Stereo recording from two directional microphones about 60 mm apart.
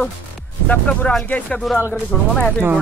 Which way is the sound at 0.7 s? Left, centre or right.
Left.